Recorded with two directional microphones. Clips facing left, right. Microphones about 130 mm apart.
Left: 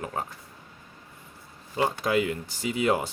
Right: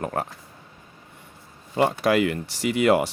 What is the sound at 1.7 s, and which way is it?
Speech, 70° right (ahead or behind).